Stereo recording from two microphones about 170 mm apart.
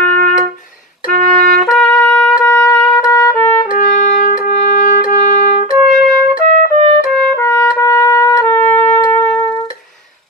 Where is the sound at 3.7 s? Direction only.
45° left (ahead or behind).